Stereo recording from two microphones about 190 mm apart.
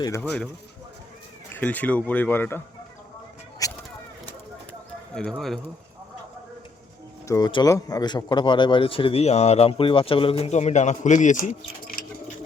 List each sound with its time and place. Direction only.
0.2 s speech: 5° left (ahead or behind)
1.5 s speech: 10° left (ahead or behind)
3.6 s a sound: 20° left (ahead or behind)
5.1 s speech: 5° left (ahead or behind)
7.3 s a man's voice: 20° left (ahead or behind); by 12.0 s 45° left (ahead or behind)